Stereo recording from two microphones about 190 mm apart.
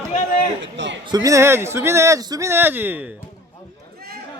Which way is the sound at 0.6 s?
75° right (ahead or behind).